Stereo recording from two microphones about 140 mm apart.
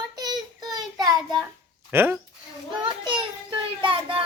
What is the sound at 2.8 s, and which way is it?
Children playing, 35° right (ahead or behind).